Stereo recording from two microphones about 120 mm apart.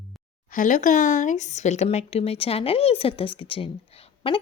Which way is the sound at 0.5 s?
90° left.